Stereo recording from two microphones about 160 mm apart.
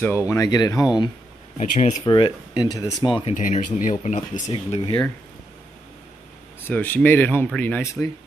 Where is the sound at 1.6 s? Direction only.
50° left (ahead or behind).